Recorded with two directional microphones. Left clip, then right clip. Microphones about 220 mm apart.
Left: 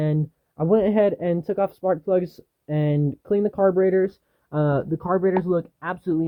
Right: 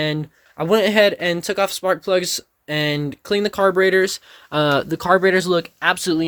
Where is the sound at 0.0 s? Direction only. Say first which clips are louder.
Right 4 dB; 5° right (ahead or behind).